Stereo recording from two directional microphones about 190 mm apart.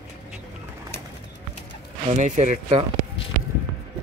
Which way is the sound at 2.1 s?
40° right (ahead or behind).